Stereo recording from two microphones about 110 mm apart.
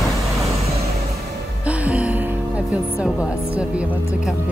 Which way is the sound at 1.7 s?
10° right (ahead or behind).